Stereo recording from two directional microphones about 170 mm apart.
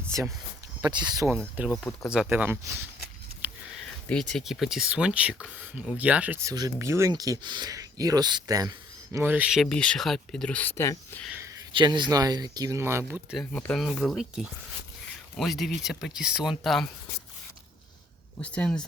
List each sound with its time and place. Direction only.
0.1 s speech: 20° right (ahead or behind)
1.6 s speech: 10° right (ahead or behind)
3.4 s a sound: 10° right (ahead or behind)
4.1 s speech: 5° left (ahead or behind); by 8.7 s 20° right (ahead or behind)
9.1 s speech: 10° right (ahead or behind); by 11.3 s 15° left (ahead or behind)
11.3 s a sound: 15° right (ahead or behind)
11.7 s speech: 30° right (ahead or behind); by 13.4 s 10° right (ahead or behind)
13.4 s speech: 10° left (ahead or behind)
18.4 s speech: 5° left (ahead or behind)